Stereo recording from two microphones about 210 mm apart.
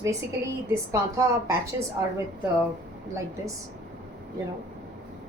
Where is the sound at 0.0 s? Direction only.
15° right (ahead or behind).